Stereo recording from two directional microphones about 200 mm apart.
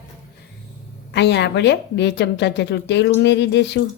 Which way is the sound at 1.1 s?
60° left (ahead or behind).